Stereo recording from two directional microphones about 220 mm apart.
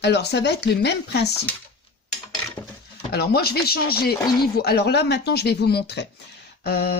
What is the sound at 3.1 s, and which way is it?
Speech, 45° left (ahead or behind).